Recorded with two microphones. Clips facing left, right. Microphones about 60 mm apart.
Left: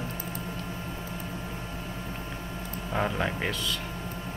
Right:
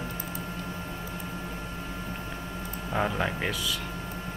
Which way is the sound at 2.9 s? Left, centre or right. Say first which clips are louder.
Right 1 dB; centre.